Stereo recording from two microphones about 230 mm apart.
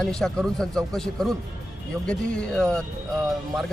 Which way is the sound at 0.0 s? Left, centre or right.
Centre.